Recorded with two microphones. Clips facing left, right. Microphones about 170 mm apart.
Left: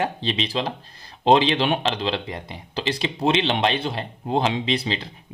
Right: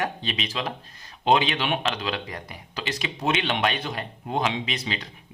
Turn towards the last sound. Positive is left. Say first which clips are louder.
# left 6 dB
turn(degrees=30)  # may be behind; listen again after turning